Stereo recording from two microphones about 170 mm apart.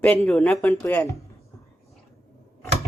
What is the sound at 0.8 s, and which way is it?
Speech, 20° left (ahead or behind).